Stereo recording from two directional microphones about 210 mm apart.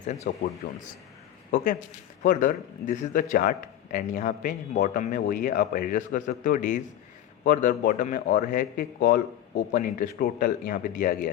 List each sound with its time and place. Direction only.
0.0 s speech: 35° left (ahead or behind)